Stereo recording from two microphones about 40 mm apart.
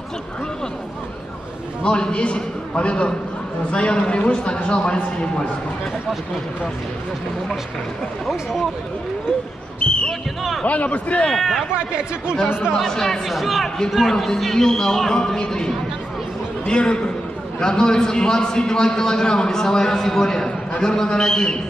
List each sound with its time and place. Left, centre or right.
1.8 s a man's voice: left
9.8 s basketball bounce: left
10.6 s a man's voice: left
11.3 s speech: centre
11.7 s speech: right
12.8 s a man's voice: centre
13.3 s a man's voice: centre